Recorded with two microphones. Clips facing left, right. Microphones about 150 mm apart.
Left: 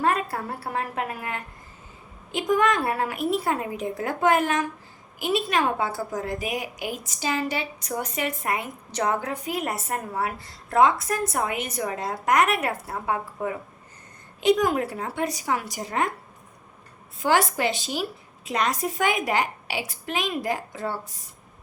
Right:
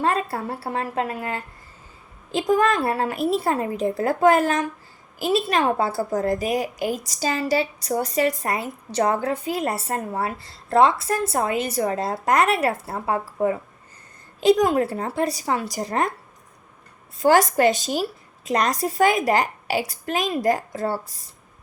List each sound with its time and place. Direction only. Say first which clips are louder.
0.0 s a woman's voice: right 2 dB; 30° right (ahead or behind)
17.2 s a woman's voice: right 6 dB; 40° right (ahead or behind)